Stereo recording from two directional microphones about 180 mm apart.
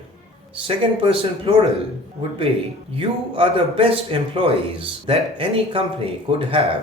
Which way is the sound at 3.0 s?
30° right (ahead or behind).